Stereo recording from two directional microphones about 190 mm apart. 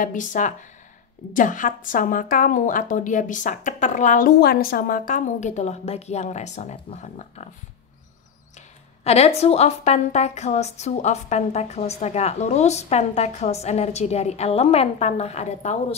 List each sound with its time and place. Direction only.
0.0 s a woman's voice: 45° left (ahead or behind)
8.5 s speech: 35° left (ahead or behind)